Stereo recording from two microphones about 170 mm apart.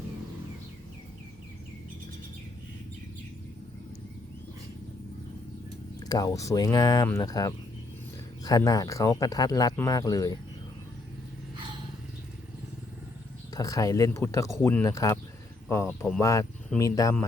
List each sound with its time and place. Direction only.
6.0 s speech: 20° left (ahead or behind)
13.5 s speech: 20° left (ahead or behind)